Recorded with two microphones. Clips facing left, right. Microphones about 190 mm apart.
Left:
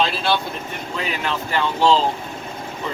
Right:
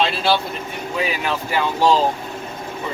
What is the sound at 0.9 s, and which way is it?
Speech, 10° right (ahead or behind).